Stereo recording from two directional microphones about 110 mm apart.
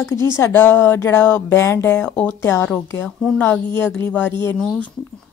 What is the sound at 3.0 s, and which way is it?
A woman's voice, 10° left (ahead or behind).